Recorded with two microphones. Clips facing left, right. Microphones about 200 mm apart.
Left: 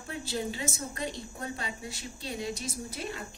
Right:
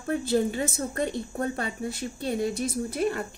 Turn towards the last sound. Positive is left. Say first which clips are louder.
# right 11 dB
turn(degrees=-55)  # may be behind; listen again after turning